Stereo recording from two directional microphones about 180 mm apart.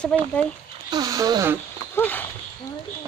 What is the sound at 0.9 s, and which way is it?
Speech, 20° right (ahead or behind).